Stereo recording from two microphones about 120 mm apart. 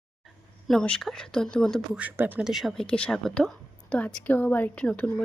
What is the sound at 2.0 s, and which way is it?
Speech, 15° right (ahead or behind).